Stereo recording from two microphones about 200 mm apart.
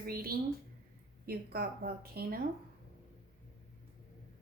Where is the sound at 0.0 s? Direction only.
50° right (ahead or behind).